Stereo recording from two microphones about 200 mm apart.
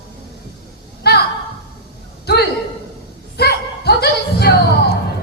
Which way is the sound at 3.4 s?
55° left (ahead or behind).